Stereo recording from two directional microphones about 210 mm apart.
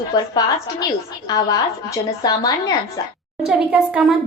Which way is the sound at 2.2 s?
15° left (ahead or behind).